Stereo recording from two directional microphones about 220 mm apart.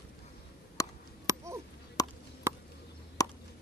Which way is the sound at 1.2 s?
15° right (ahead or behind).